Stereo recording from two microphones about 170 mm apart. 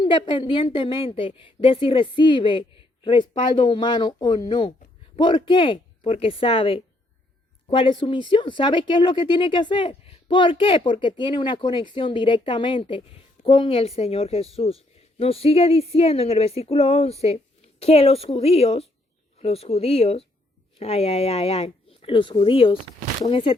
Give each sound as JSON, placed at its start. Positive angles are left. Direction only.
{"t": 0.0, "sound": "a woman's voice", "side_deg": 30}